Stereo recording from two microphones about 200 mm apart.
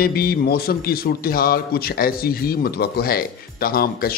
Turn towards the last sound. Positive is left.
turn(degrees=50)  # may be behind; listen again after turning